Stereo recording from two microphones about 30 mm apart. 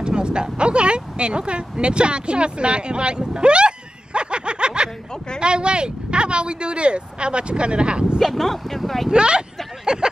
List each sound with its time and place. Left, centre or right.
0.0 s speech: right
8.4 s speech: centre
9.1 s speech: right
9.9 s a sound: right